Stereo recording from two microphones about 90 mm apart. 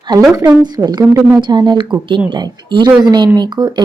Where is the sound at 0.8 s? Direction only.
45° right (ahead or behind).